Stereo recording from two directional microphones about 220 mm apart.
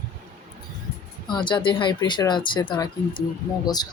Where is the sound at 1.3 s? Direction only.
20° left (ahead or behind).